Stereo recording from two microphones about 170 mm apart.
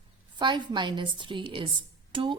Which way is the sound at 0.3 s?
25° right (ahead or behind).